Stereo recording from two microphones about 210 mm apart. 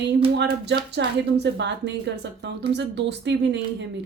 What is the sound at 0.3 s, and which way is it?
Speech, 55° right (ahead or behind).